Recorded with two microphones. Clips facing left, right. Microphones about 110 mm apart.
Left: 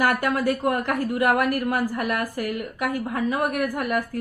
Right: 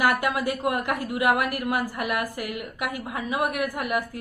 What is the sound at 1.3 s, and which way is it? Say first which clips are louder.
Speech: left 1 dB; 45° left (ahead or behind).